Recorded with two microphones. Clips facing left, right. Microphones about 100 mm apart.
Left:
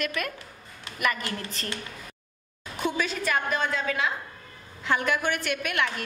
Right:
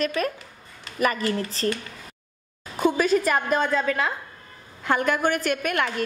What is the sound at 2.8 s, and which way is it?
A woman's voice, 45° right (ahead or behind).